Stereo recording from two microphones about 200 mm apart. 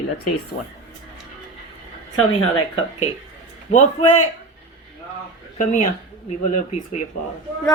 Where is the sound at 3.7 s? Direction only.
35° left (ahead or behind).